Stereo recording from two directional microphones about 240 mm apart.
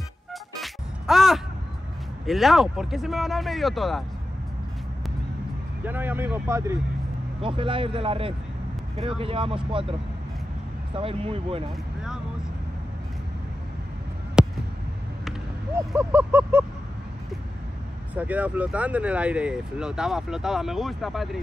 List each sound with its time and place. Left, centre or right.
0.3 s music: centre
2.2 s speech: centre
5.9 s speech: centre
7.4 s speech: right
11.0 s speech: right
14.4 s a sound: centre
18.1 s speech: centre